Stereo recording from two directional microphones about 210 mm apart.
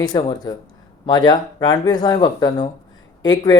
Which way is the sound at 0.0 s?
20° left (ahead or behind).